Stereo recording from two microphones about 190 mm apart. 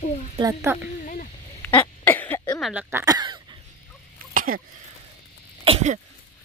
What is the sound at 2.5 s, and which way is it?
Speech, centre (ahead or behind).